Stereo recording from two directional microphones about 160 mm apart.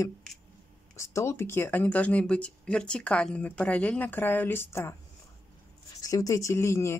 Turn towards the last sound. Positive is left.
turn(degrees=20)  # may be behind; listen again after turning